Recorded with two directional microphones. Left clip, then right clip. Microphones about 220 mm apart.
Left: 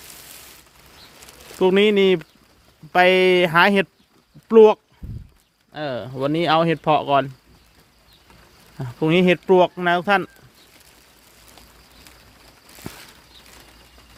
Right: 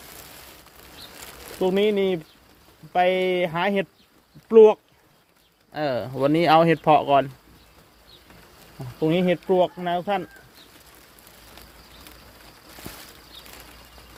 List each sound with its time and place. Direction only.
1.5 s speech: 35° left (ahead or behind)
5.7 s speech: 5° left (ahead or behind)
9.0 s speech: 35° left (ahead or behind)